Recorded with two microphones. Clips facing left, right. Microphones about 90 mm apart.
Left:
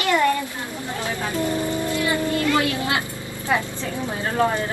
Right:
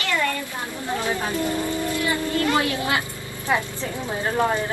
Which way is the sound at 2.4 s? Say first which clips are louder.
Left 1 dB; 25° right (ahead or behind).